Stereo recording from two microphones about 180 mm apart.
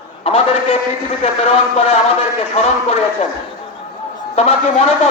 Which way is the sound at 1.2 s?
35° left (ahead or behind).